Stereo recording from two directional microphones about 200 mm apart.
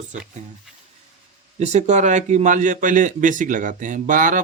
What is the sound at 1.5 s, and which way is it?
A man's voice, 35° right (ahead or behind).